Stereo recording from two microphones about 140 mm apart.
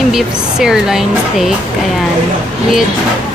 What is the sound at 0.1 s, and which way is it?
Speech, 5° right (ahead or behind).